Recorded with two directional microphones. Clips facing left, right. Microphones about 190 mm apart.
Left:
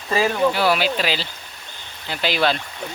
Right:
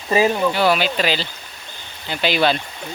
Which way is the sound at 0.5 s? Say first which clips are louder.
Right 2 dB; 5° left (ahead or behind).